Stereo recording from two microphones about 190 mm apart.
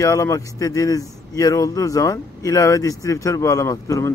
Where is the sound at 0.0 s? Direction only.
15° left (ahead or behind).